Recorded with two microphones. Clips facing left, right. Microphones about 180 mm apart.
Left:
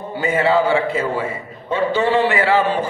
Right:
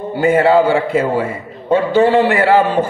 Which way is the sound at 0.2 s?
50° right (ahead or behind).